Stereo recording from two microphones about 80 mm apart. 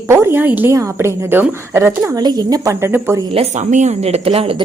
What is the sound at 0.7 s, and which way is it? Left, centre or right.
A woman's voice, right.